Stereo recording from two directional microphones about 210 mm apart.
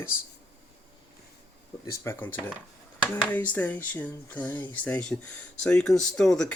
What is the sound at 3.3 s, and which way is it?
Speech, 10° left (ahead or behind).